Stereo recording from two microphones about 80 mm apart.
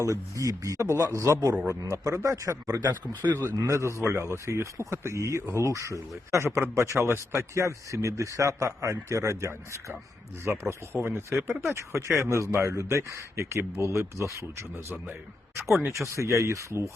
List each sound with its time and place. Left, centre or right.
0.0 s a man's voice: right
3.2 s speech: right
3.5 s a man's voice: right
11.3 s speech: centre
11.7 s a man's voice: right
16.1 s a man's voice: right